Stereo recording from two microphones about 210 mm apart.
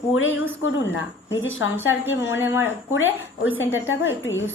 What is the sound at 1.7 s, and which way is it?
A woman's voice, 10° right (ahead or behind).